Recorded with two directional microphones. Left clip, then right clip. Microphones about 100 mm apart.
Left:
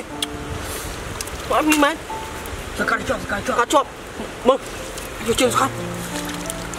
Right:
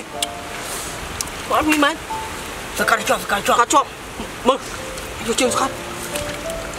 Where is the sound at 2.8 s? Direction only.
20° right (ahead or behind).